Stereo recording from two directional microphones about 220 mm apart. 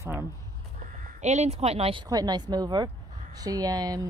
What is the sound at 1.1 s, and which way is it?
Speech, 30° right (ahead or behind).